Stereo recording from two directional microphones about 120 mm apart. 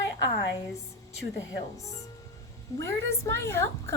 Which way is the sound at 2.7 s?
25° left (ahead or behind).